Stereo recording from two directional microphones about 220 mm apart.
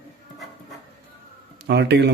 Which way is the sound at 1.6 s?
50° right (ahead or behind).